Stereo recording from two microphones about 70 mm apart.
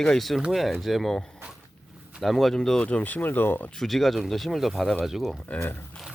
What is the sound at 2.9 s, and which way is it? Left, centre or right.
Speech, left.